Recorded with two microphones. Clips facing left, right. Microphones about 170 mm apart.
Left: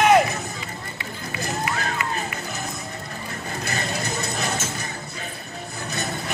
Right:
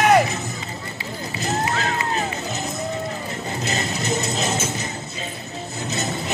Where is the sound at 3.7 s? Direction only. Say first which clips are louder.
Right 3 dB; 20° right (ahead or behind).